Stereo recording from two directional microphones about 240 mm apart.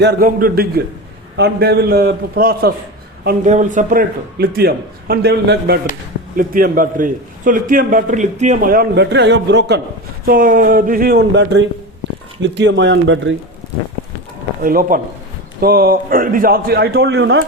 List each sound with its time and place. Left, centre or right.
0.0 s a man's voice: right
14.6 s a man's voice: right